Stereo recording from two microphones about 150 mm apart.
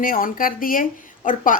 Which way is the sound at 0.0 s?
70° left (ahead or behind).